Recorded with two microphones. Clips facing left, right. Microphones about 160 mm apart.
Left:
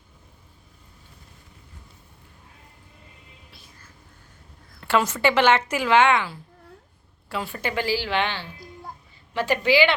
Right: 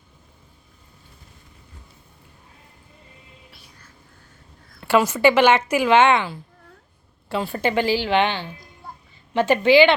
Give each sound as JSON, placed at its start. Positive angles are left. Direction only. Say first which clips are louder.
{"t": 4.8, "sound": "a woman's voice", "louder": "right 5 dB", "side_deg": -10}